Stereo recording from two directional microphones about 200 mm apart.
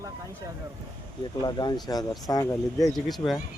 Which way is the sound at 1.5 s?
20° left (ahead or behind).